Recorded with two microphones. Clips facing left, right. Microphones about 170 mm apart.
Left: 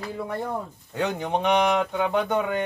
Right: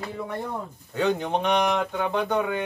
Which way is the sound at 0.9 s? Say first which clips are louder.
Right 2 dB; 15° left (ahead or behind).